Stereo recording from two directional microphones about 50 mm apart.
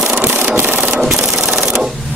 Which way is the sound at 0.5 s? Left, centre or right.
Right.